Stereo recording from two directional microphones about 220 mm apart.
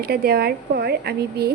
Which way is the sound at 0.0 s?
45° right (ahead or behind).